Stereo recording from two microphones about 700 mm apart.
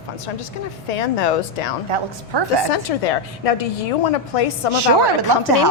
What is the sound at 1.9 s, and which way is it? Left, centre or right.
Speech, right.